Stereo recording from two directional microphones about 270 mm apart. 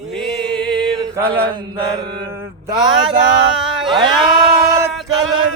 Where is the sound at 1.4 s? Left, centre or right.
Centre.